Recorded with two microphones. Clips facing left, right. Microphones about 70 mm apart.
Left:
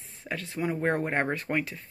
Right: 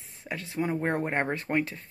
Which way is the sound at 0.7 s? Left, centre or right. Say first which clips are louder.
Left 2 dB; centre.